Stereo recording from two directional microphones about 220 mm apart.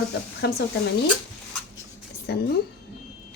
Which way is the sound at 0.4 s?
45° left (ahead or behind).